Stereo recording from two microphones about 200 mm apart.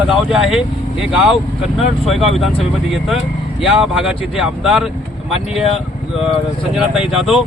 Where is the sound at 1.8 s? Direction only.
Centre (ahead or behind).